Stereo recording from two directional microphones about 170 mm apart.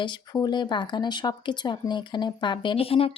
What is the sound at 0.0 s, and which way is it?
Speech, 25° left (ahead or behind).